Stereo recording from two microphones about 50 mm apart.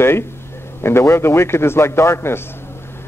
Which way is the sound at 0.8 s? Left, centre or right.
Left.